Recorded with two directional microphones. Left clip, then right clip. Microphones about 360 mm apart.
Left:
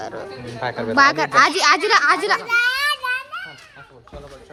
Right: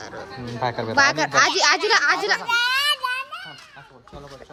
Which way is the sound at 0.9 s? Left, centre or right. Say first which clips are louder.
Left 4 dB; centre.